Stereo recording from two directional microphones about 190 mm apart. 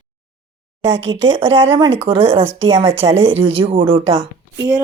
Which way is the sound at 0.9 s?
70° right (ahead or behind).